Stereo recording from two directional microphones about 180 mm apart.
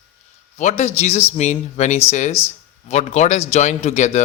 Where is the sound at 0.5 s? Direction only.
40° left (ahead or behind).